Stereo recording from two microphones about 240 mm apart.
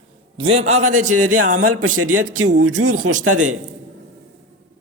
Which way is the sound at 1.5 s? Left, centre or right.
Right.